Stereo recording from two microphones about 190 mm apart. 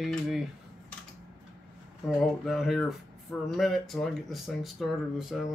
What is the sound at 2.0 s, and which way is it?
Speech, centre (ahead or behind).